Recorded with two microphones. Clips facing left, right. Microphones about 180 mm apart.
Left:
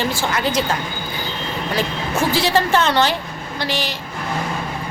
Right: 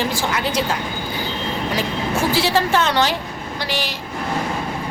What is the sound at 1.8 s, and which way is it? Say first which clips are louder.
A woman's voice: left 2 dB; 10° right (ahead or behind).